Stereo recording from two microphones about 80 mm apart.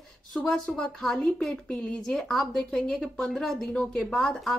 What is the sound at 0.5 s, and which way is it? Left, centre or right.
Speech, centre.